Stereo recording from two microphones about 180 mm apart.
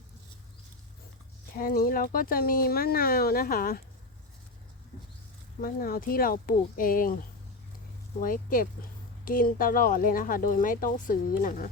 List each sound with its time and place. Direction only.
1.5 s speech: 55° left (ahead or behind)
5.5 s speech: 55° left (ahead or behind)
8.2 s speech: 50° left (ahead or behind)